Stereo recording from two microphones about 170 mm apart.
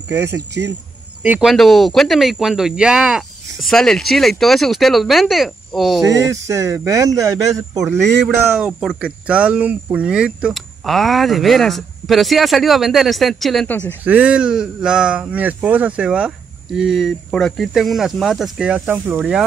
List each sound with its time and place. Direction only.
0.1 s speech: 15° right (ahead or behind); by 6.0 s centre (ahead or behind)
6.0 s speech: 20° right (ahead or behind); by 13.9 s 10° left (ahead or behind)
14.0 s speech: 10° right (ahead or behind)